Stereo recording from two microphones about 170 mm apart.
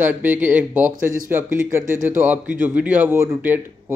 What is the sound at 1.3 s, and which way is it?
Speech, 10° right (ahead or behind).